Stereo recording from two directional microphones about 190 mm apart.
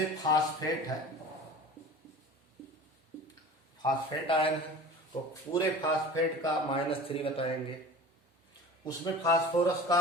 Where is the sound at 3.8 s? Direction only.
25° left (ahead or behind).